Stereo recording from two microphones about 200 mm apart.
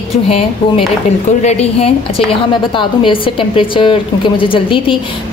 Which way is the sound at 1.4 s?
30° left (ahead or behind).